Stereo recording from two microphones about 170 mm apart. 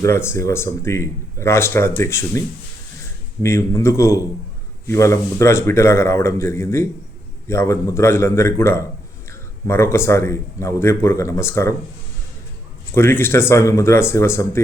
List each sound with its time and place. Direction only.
0.0 s speech: 15° left (ahead or behind)
3.4 s speech: 15° left (ahead or behind)
12.9 s speech: 15° left (ahead or behind)